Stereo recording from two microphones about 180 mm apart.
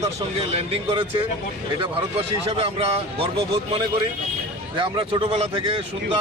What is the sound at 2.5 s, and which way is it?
Speech, 35° right (ahead or behind).